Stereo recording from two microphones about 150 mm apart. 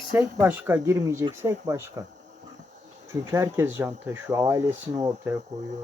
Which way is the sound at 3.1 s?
20° right (ahead or behind).